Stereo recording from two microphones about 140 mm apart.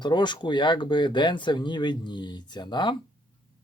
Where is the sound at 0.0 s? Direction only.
35° left (ahead or behind).